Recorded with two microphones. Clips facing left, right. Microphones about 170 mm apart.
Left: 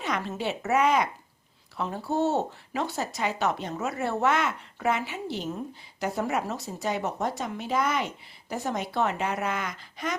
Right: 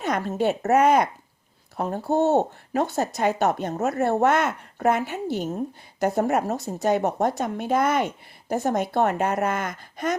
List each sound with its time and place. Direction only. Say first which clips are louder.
0.0 s speech: right 7 dB; 45° right (ahead or behind)